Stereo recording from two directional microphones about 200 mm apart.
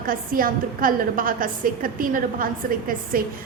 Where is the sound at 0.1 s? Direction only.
45° right (ahead or behind).